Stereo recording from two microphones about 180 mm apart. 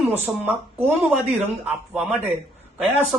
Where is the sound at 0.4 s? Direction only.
10° right (ahead or behind).